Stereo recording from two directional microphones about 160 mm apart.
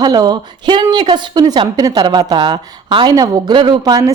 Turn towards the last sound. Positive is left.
turn(degrees=-25)  # may be behind; listen again after turning